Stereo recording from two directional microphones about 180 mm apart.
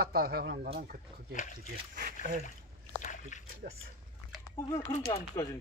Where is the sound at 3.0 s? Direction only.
45° left (ahead or behind).